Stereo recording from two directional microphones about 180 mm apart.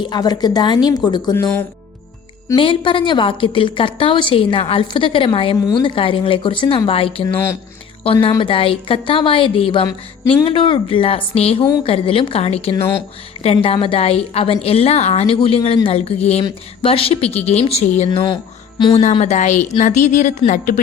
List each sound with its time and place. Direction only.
0.0 s a woman's voice: 25° left (ahead or behind)
2.6 s a woman's voice: 30° left (ahead or behind)
12.7 s speech: 15° left (ahead or behind)
13.4 s a woman's voice: 35° left (ahead or behind)